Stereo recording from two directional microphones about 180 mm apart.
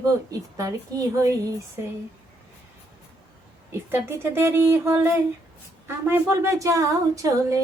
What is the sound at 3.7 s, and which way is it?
A woman's voice, 15° right (ahead or behind).